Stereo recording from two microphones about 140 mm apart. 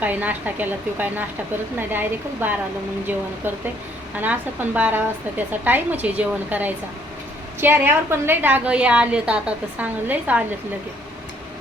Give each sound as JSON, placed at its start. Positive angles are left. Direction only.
{"t": 0.0, "sound": "a woman's voice", "side_deg": -10}